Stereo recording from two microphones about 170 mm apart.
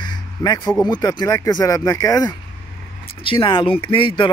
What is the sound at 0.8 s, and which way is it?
Speech, 25° left (ahead or behind).